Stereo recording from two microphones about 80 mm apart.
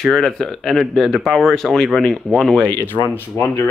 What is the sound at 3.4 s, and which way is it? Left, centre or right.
Speech, left.